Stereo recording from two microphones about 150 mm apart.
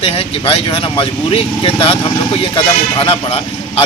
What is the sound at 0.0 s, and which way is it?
Speech, 35° left (ahead or behind).